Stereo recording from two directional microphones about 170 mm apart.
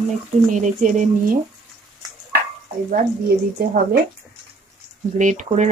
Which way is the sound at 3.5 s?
65° right (ahead or behind).